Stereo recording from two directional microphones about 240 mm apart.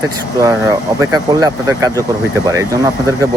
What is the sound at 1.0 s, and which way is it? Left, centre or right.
Speech, centre.